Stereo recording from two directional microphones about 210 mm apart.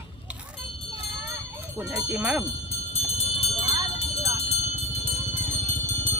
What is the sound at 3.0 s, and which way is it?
Clip-clop, 30° left (ahead or behind).